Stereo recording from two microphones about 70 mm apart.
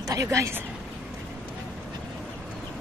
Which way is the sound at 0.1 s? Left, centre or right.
Right.